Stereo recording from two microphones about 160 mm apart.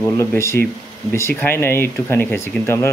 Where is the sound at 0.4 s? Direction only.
15° left (ahead or behind).